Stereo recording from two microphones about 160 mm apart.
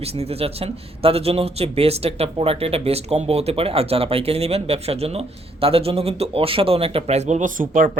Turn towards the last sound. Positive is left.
turn(degrees=-55)  # may be behind; listen again after turning